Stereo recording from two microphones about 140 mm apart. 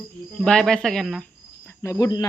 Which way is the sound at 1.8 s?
20° left (ahead or behind).